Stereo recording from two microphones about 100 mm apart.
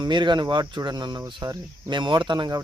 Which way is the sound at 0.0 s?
50° right (ahead or behind).